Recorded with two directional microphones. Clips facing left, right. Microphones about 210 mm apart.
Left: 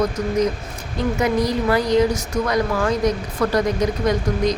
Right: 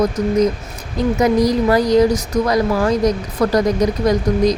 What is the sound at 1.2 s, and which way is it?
Speech, 40° right (ahead or behind).